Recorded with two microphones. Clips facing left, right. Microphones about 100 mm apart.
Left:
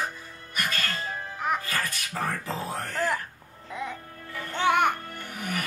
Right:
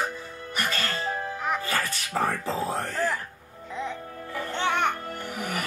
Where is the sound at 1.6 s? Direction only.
20° right (ahead or behind).